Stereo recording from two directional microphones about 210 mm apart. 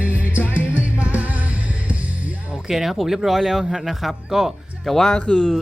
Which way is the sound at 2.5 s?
Centre (ahead or behind).